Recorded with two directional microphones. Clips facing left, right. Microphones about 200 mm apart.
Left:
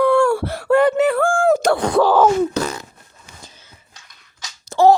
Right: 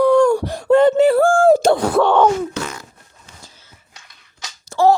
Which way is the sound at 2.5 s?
40° left (ahead or behind).